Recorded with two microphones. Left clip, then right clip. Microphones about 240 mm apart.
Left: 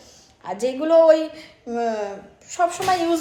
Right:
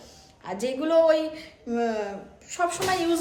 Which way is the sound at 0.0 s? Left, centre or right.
Centre.